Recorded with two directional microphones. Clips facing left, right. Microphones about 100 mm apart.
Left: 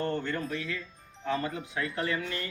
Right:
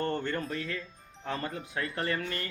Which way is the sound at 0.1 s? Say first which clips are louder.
Even; 40° right (ahead or behind).